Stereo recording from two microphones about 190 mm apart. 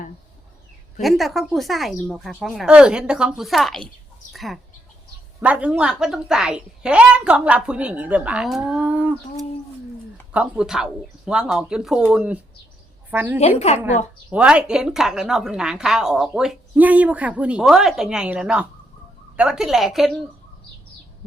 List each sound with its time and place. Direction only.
1.0 s a woman's voice: centre (ahead or behind)
4.3 s chicken: centre (ahead or behind)
5.4 s a woman's voice: 5° right (ahead or behind)
10.3 s a woman's voice: 5° right (ahead or behind)
13.6 s a woman's voice: 35° left (ahead or behind)
14.3 s a woman's voice: 5° right (ahead or behind)